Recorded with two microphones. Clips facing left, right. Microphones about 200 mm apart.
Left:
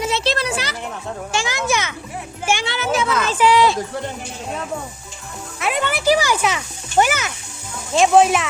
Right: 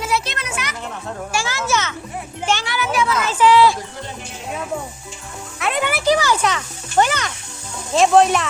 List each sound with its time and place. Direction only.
0.0 s music: 25° left (ahead or behind)
1.3 s a child's voice: 20° left (ahead or behind)
2.6 s music: 25° left (ahead or behind)
3.3 s a child's voice: 15° left (ahead or behind)
5.5 s music: centre (ahead or behind)
6.1 s music: 10° left (ahead or behind)
7.9 s speech: centre (ahead or behind)